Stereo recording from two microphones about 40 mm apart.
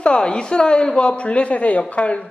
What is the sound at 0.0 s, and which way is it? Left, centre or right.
A woman's voice, left.